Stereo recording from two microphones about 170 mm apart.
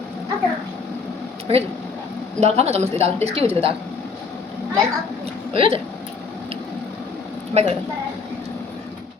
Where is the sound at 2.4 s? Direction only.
40° right (ahead or behind).